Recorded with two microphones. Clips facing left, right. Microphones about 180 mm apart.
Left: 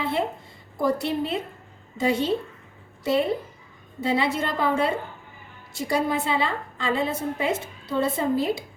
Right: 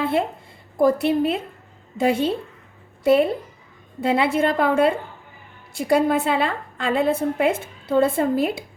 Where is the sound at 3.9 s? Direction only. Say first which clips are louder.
Right 4 dB; 55° right (ahead or behind).